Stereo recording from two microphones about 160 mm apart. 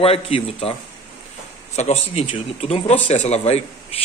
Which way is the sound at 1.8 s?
45° left (ahead or behind).